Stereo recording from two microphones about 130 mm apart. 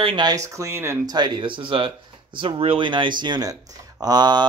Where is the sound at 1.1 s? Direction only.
35° right (ahead or behind).